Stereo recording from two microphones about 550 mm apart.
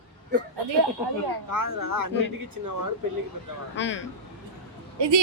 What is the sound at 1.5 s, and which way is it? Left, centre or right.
Speech, right.